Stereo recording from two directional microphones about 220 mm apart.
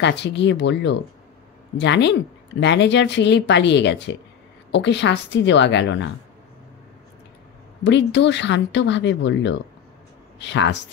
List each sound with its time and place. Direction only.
0.0 s speech: 50° left (ahead or behind)
7.8 s speech: 55° left (ahead or behind)